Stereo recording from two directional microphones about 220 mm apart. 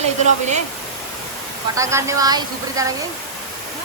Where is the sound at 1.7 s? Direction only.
15° right (ahead or behind).